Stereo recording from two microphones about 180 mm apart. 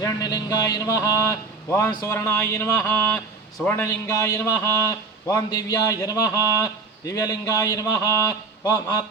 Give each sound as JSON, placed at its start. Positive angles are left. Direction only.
{"t": 0.0, "sound": "a man's voice", "side_deg": 20}